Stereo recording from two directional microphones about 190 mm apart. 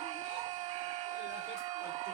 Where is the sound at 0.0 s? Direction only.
30° right (ahead or behind).